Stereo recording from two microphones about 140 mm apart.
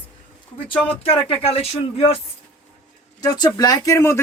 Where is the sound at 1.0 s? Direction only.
45° left (ahead or behind).